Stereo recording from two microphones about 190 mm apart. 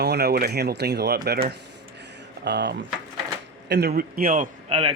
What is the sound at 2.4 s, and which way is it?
Speech, 65° right (ahead or behind).